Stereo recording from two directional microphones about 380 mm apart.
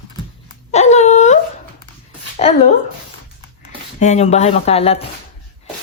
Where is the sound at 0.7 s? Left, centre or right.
Centre.